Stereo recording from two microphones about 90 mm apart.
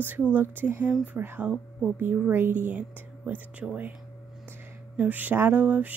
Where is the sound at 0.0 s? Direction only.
20° right (ahead or behind).